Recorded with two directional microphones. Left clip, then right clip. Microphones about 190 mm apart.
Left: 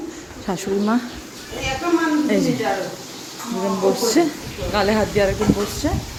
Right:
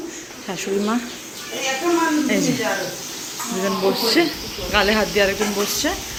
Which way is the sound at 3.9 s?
20° left (ahead or behind).